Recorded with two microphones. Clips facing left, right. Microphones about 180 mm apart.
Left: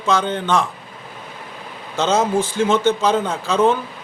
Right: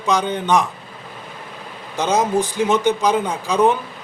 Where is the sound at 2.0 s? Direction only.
15° right (ahead or behind).